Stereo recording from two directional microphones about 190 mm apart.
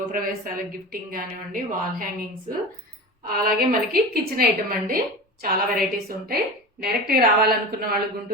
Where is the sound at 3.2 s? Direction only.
50° right (ahead or behind).